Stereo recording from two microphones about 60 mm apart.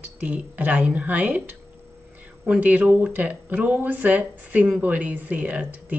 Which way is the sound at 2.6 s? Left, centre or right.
Right.